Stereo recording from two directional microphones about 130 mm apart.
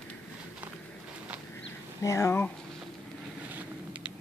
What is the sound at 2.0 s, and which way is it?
Speech, 25° left (ahead or behind).